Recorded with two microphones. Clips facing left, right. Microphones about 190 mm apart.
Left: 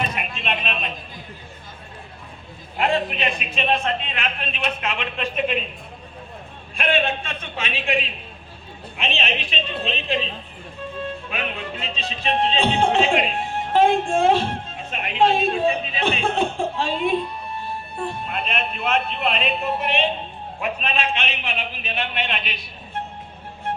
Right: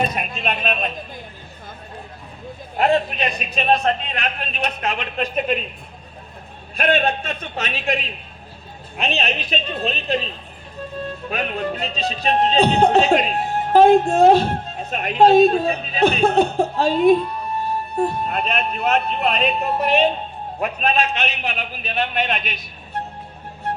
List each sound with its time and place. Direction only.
0.1 s a sound: 40° right (ahead or behind)
2.7 s speech: 40° right (ahead or behind)
6.7 s speech: 40° right (ahead or behind)
11.3 s speech: 40° right (ahead or behind)
23.0 s music: 40° right (ahead or behind)